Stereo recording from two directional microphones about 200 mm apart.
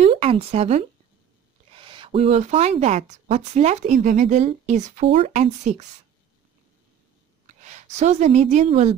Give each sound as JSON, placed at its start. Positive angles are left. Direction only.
{"t": 0.0, "sound": "speech", "side_deg": -30}
{"t": 7.4, "sound": "a woman's voice", "side_deg": -35}